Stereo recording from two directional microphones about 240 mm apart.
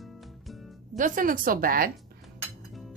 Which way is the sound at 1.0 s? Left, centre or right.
Right.